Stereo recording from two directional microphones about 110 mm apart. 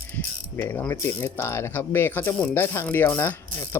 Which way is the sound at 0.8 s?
20° left (ahead or behind).